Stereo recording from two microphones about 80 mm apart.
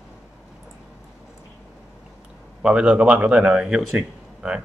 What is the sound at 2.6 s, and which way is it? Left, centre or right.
Speech, centre.